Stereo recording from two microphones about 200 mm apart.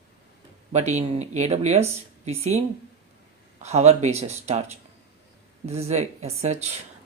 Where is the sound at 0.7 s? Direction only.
35° right (ahead or behind).